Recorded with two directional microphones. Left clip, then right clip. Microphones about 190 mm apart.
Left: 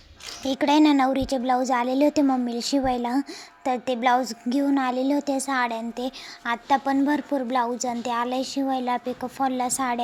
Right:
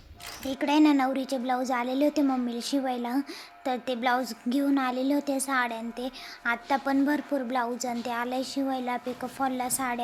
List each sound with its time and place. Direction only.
0.4 s a woman's voice: 25° left (ahead or behind)